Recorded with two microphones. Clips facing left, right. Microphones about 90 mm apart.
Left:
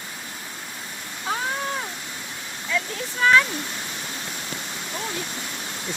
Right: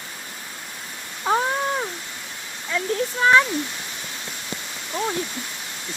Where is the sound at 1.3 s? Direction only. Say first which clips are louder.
Right 7 dB; 30° right (ahead or behind).